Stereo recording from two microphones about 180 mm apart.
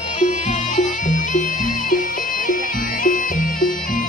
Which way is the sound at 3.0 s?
50° left (ahead or behind).